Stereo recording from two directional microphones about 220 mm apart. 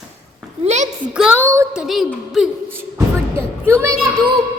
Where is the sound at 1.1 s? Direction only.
5° right (ahead or behind).